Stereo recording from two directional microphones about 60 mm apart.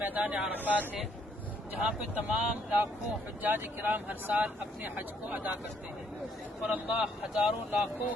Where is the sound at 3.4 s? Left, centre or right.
Right.